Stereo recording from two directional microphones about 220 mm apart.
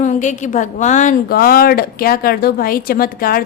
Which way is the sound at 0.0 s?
35° left (ahead or behind).